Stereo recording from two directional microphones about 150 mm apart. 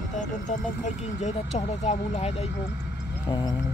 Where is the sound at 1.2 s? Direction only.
50° left (ahead or behind).